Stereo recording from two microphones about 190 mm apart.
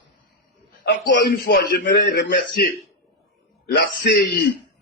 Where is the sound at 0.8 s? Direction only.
65° left (ahead or behind).